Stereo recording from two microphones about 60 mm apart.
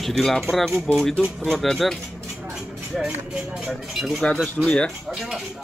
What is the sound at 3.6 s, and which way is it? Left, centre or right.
Speech, centre.